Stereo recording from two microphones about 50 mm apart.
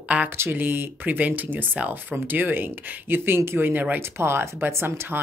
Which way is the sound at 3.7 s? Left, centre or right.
Right.